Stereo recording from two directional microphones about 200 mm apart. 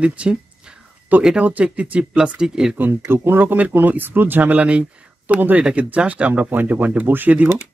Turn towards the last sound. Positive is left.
turn(degrees=-10)  # may be behind; listen again after turning